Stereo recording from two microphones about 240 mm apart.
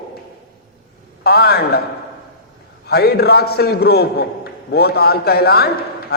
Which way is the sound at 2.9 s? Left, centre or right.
Left.